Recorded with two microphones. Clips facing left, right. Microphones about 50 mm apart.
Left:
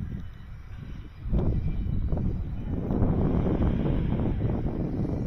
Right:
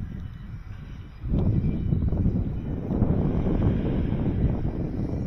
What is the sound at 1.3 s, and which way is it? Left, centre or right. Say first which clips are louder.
Vehicle: right 4 dB; right.